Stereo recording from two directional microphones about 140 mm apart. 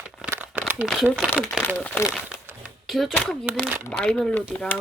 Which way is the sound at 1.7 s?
15° left (ahead or behind).